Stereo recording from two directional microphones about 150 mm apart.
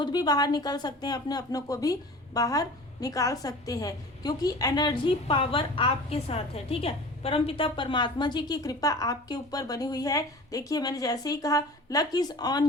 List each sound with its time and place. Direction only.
0.0 s a woman's voice: 25° left (ahead or behind)